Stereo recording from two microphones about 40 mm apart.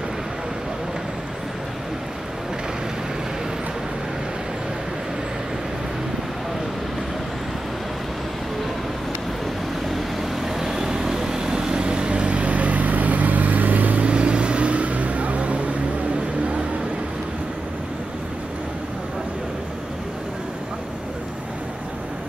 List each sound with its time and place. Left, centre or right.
9.8 s vehicle: centre
10.6 s vehicle: centre; by 14.0 s right
14.0 s vehicle: right